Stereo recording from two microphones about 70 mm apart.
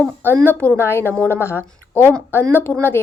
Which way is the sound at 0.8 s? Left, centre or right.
Left.